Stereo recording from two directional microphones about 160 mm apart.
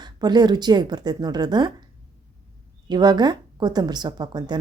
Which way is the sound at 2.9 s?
25° right (ahead or behind).